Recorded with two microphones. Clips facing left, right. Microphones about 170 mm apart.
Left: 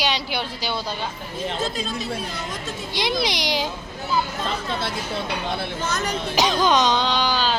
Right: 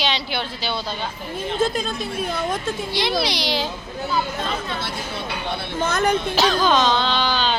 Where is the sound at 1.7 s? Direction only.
55° right (ahead or behind).